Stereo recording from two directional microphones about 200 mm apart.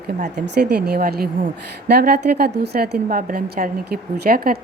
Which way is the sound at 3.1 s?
40° right (ahead or behind).